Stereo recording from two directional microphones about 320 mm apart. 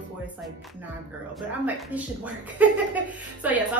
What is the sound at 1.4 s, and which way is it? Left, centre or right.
A woman's voice, centre.